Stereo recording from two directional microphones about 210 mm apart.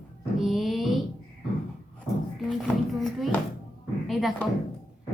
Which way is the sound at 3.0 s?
Centre (ahead or behind).